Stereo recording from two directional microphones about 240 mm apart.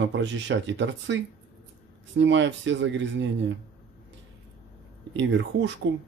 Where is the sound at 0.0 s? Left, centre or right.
Right.